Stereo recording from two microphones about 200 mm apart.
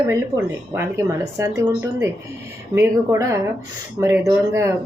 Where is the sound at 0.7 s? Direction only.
15° right (ahead or behind).